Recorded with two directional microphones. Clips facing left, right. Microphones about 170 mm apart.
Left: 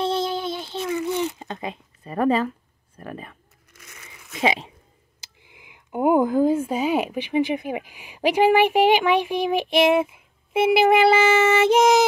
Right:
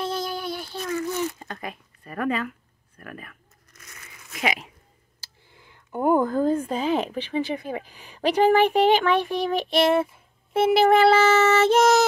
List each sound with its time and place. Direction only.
0.0 s a sound: 25° left (ahead or behind)
3.0 s speech: 25° left (ahead or behind)
5.2 s speech: 15° left (ahead or behind)